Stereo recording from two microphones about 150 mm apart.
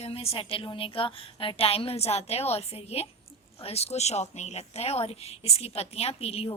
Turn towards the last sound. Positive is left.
turn(degrees=40)  # may be behind; listen again after turning